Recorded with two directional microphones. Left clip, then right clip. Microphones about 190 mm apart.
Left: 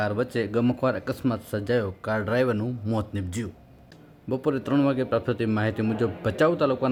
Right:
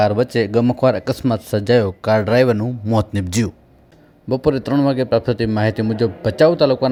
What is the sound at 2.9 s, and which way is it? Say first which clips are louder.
Speech: right 15 dB; 35° right (ahead or behind).